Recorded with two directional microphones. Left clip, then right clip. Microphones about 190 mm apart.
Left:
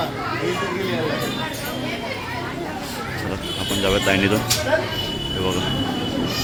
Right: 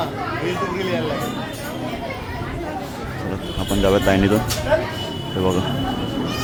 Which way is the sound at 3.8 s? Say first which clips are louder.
Right 2 dB; 20° right (ahead or behind).